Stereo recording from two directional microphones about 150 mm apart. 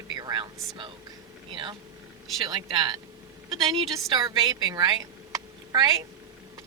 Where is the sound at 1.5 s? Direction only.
30° right (ahead or behind).